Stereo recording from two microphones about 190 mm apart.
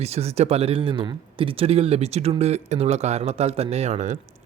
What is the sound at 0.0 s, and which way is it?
Speech, 35° right (ahead or behind).